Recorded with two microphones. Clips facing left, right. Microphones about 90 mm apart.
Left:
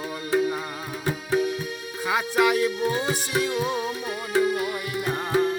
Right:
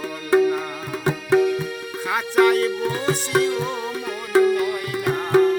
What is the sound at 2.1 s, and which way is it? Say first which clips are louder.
Music: right 4 dB; 5° left (ahead or behind).